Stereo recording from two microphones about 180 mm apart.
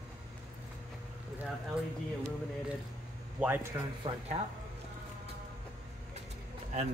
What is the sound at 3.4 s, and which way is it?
Speech, 10° right (ahead or behind).